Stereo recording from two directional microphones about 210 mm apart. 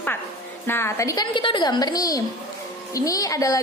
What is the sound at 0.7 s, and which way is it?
A woman's voice, 10° left (ahead or behind).